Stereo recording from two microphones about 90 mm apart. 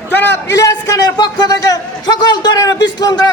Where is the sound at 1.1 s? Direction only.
55° left (ahead or behind).